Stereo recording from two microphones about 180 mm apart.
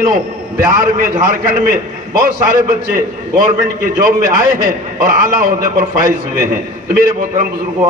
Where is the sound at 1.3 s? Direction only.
50° right (ahead or behind).